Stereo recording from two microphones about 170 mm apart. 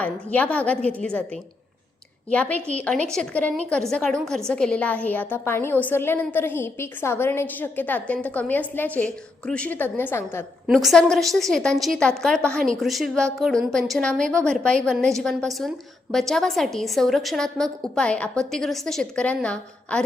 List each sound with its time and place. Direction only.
0.0 s a woman's voice: 10° left (ahead or behind)
10.8 s a woman's voice: centre (ahead or behind)